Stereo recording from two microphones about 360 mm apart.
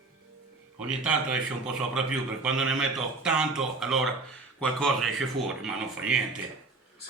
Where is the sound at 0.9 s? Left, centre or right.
Centre.